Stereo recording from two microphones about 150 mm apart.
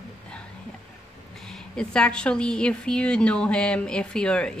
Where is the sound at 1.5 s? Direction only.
5° left (ahead or behind).